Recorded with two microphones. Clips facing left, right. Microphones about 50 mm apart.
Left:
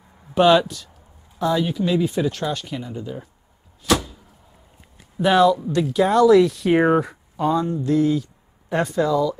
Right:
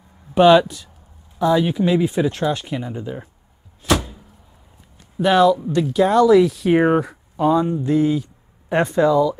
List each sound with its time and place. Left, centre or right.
0.4 s speech: centre
1.6 s speech: centre
3.8 s door: centre
5.1 s speech: centre
7.6 s speech: right